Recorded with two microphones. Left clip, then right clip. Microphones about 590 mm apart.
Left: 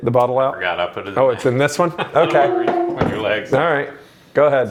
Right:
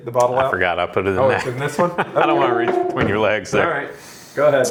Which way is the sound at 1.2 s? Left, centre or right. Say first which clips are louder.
Left 7 dB; left.